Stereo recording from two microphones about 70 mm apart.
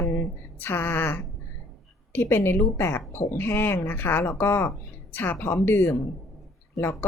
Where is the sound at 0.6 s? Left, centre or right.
Left.